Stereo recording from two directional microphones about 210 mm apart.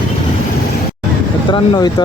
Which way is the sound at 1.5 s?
20° left (ahead or behind).